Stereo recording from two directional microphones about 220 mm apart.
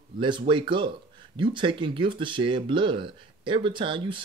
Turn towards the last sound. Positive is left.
turn(degrees=-20)  # may be behind; listen again after turning